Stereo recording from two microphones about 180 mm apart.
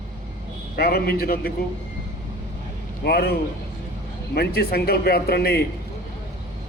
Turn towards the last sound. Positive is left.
turn(degrees=60)  # may be behind; listen again after turning